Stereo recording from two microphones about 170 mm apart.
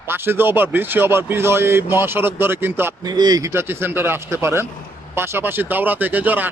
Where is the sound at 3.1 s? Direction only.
25° right (ahead or behind).